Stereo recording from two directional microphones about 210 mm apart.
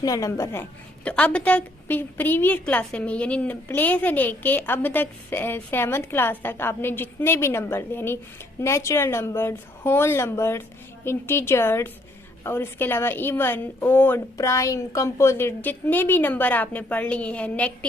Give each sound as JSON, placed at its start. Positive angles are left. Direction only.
{"t": 0.0, "sound": "a woman's voice", "side_deg": 15}